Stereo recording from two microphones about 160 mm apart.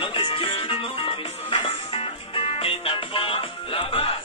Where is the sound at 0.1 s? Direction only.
35° left (ahead or behind).